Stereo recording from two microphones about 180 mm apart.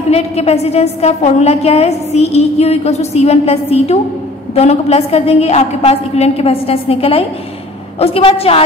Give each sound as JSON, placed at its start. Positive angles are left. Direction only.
{"t": 0.1, "sound": "a woman's voice", "side_deg": 35}